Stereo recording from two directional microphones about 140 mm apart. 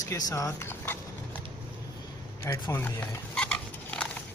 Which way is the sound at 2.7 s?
15° left (ahead or behind).